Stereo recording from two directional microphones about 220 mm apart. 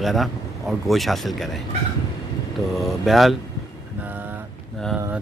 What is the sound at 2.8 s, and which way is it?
Speech, centre (ahead or behind).